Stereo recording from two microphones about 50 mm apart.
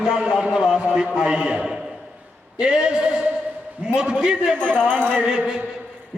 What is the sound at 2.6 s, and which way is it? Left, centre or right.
A man's voice, centre.